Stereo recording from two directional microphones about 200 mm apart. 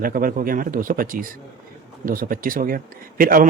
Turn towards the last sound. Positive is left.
turn(degrees=-45)  # may be behind; listen again after turning